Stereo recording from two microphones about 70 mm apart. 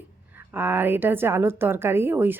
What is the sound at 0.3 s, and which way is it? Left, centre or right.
A woman's voice, right.